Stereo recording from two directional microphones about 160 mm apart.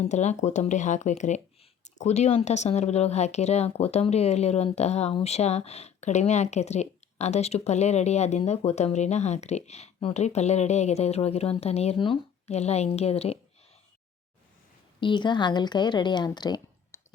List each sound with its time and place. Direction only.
0.0 s speech: 45° left (ahead or behind)
15.0 s a woman's voice: 30° left (ahead or behind)